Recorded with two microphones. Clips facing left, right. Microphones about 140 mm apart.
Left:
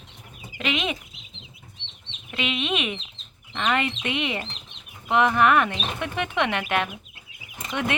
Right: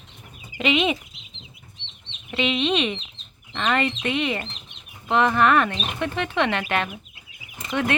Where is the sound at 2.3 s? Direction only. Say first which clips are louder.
Right 5 dB; 5° left (ahead or behind).